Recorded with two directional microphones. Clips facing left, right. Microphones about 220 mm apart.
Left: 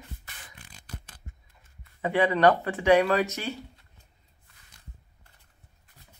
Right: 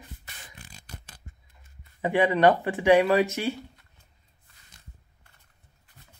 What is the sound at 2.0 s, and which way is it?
Speech, 15° right (ahead or behind).